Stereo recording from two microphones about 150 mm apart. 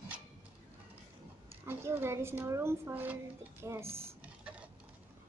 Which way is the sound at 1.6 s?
15° right (ahead or behind).